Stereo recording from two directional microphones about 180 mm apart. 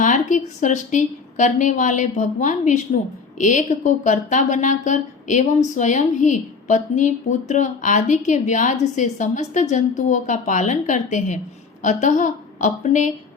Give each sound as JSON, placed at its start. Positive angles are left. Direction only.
{"t": 0.0, "sound": "a woman's voice", "side_deg": 45}